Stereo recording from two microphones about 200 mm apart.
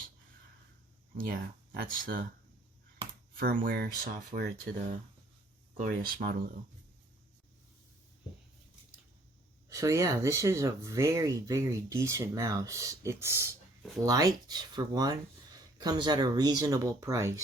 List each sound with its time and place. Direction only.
1.1 s speech: 45° right (ahead or behind)
3.3 s speech: 45° right (ahead or behind)
9.6 s speech: 15° right (ahead or behind)